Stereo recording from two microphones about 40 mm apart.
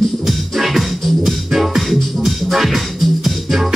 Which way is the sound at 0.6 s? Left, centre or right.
Centre.